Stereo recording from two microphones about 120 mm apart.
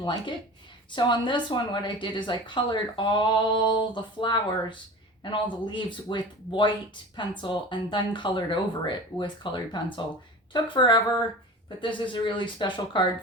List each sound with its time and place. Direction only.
0.0 s speech: 40° left (ahead or behind)